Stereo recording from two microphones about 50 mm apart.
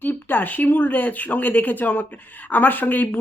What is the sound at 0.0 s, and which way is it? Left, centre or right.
Speech, left.